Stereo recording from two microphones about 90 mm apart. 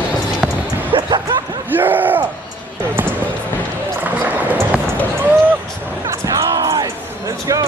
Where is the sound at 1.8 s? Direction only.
20° right (ahead or behind).